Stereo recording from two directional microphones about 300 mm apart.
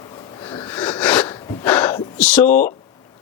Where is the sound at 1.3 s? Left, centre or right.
Centre.